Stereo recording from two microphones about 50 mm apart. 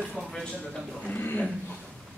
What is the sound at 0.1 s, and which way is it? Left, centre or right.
Speech, centre.